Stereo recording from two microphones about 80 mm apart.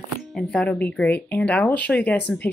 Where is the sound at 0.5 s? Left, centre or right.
Centre.